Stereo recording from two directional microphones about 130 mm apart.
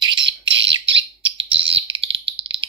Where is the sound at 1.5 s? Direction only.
45° right (ahead or behind).